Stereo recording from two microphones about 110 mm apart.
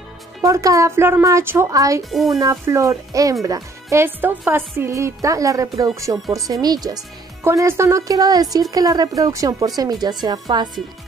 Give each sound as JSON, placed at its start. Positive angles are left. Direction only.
{"t": 0.4, "sound": "speech", "side_deg": -30}
{"t": 2.0, "sound": "speech", "side_deg": 0}
{"t": 2.3, "sound": "a woman's voice", "side_deg": -30}
{"t": 7.4, "sound": "a woman's voice", "side_deg": -25}